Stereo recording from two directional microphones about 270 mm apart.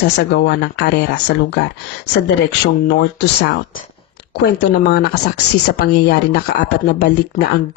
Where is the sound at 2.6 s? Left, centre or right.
Left.